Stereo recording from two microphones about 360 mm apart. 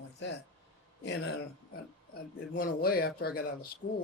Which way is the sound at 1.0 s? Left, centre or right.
Left.